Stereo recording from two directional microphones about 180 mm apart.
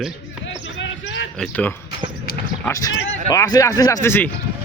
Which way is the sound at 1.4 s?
10° left (ahead or behind).